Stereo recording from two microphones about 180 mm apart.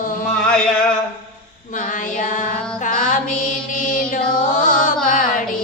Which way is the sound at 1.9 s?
45° left (ahead or behind).